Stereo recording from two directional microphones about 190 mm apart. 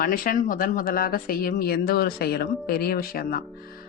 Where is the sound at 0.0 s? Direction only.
45° left (ahead or behind).